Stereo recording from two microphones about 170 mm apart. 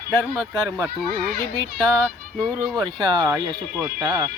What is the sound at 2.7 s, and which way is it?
Speech, 25° right (ahead or behind).